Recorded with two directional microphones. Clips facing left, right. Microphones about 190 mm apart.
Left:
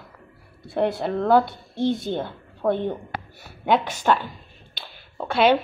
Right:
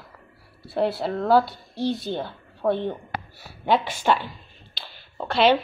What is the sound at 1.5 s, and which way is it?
Speech, 20° left (ahead or behind).